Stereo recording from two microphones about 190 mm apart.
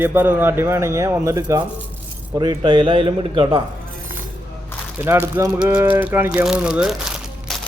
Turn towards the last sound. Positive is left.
turn(degrees=0)  # may be behind; listen again after turning